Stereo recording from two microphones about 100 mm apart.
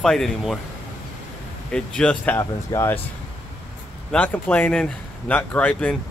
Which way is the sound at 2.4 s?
30° left (ahead or behind).